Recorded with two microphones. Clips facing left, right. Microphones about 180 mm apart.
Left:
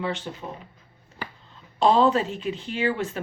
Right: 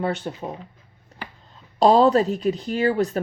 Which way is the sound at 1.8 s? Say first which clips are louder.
Right 4 dB; 40° right (ahead or behind).